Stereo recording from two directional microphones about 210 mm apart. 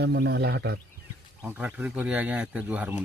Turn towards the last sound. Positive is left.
turn(degrees=-5)  # may be behind; listen again after turning